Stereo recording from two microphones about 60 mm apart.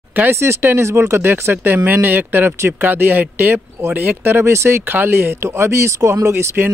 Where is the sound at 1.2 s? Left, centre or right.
Right.